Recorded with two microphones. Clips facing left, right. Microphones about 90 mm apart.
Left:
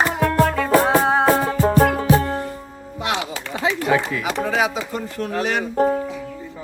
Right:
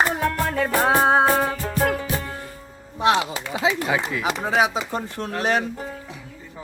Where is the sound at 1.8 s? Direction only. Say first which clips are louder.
Left 4 dB; 40° left (ahead or behind).